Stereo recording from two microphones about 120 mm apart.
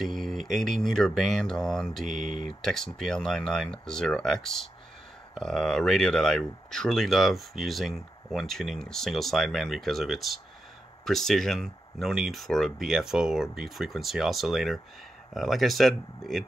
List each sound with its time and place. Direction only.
0.0 s speech: centre (ahead or behind)
2.0 s speech: 90° right
2.4 s speech: 5° left (ahead or behind)